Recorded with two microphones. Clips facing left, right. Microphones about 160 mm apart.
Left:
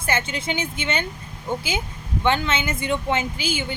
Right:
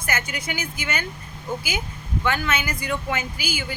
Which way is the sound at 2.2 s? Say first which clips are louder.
Left 3 dB; 25° left (ahead or behind).